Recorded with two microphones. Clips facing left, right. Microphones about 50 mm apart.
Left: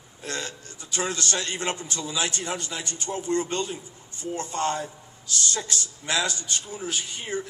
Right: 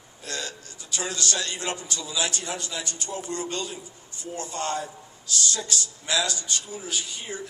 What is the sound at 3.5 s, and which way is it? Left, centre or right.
Speech, left.